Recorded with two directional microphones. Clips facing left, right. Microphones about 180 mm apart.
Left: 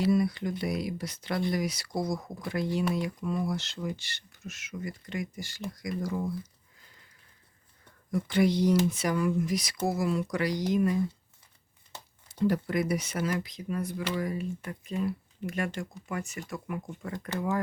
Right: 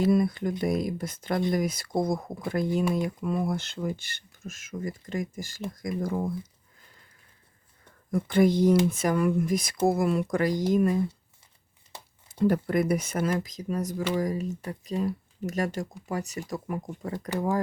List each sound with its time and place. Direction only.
0.0 s speech: 50° right (ahead or behind)
8.1 s speech: 50° right (ahead or behind)
12.3 s speech: 50° right (ahead or behind); by 17.2 s 35° right (ahead or behind)